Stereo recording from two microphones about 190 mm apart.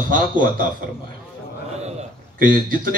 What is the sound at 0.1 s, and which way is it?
Speech, 45° right (ahead or behind).